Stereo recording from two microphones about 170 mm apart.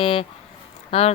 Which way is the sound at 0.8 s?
40° left (ahead or behind).